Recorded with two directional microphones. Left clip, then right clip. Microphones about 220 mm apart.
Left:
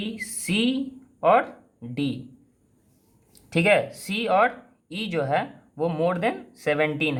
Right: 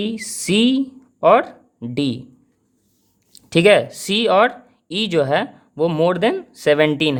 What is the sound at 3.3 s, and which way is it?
Speech, 45° right (ahead or behind).